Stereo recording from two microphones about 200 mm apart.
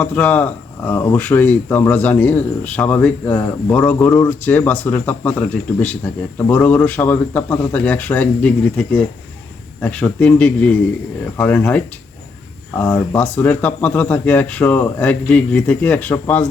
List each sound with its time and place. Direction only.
0.0 s speech: 5° left (ahead or behind)